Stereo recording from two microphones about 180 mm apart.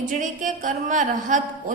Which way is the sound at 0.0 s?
45° right (ahead or behind).